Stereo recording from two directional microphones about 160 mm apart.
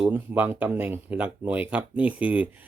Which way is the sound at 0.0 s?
10° right (ahead or behind).